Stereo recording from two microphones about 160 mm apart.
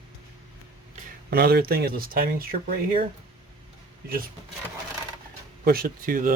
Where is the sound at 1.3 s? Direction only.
80° right.